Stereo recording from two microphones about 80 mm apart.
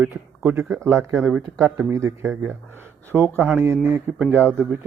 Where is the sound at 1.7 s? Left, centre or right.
Right.